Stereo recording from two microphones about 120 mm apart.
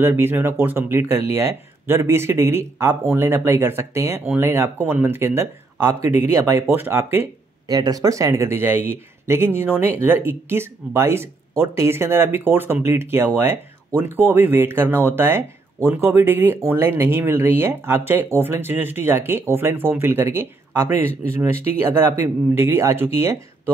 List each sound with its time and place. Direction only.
0.0 s speech: 20° right (ahead or behind)
7.6 s speech: 35° right (ahead or behind)
22.2 s speech: 20° right (ahead or behind)